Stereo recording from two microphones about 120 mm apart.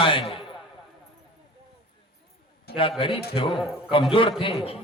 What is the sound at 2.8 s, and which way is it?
A man's voice, 45° left (ahead or behind).